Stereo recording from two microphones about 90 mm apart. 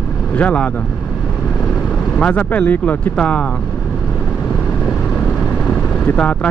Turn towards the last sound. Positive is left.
turn(degrees=15)  # may be behind; listen again after turning